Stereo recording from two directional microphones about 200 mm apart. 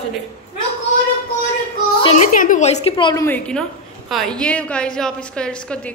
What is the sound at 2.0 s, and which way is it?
A woman's voice, 35° left (ahead or behind).